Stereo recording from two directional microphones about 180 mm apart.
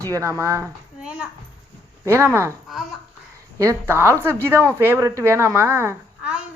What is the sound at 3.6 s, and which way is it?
Speech, 15° right (ahead or behind).